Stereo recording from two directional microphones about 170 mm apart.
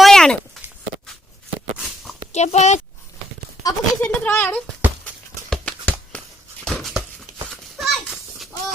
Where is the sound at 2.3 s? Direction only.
40° left (ahead or behind).